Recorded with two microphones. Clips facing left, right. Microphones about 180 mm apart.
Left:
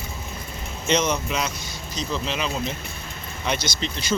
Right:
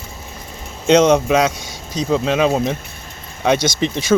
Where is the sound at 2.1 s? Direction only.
50° right (ahead or behind).